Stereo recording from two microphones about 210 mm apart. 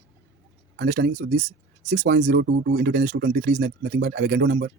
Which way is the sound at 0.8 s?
40° right (ahead or behind).